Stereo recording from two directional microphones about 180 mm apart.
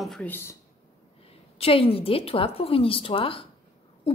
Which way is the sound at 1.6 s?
30° left (ahead or behind).